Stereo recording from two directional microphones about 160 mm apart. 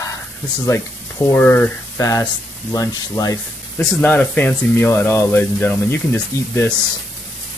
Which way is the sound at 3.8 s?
5° left (ahead or behind).